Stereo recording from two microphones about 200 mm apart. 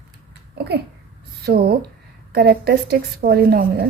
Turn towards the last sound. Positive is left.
turn(degrees=-50)  # may be behind; listen again after turning